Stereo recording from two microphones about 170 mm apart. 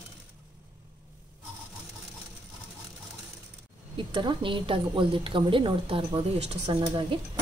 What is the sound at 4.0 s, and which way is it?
A woman's voice, 30° right (ahead or behind).